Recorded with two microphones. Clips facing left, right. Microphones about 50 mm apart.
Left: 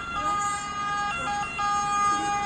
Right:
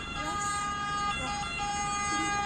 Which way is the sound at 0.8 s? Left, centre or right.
Left.